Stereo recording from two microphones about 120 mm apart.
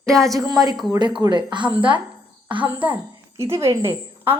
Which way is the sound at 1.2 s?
40° right (ahead or behind).